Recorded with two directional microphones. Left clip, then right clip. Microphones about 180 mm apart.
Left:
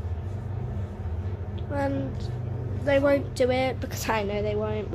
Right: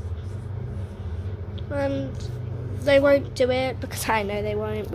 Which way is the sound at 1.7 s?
Centre (ahead or behind).